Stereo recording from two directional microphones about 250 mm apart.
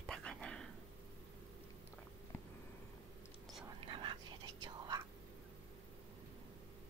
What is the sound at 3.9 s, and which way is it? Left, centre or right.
Whispering, centre.